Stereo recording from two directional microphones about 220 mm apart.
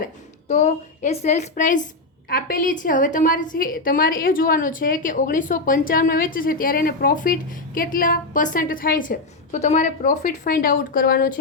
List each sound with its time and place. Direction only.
0.4 s a woman's voice: 30° left (ahead or behind)